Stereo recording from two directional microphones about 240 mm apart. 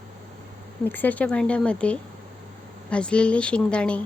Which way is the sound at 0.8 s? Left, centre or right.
Centre.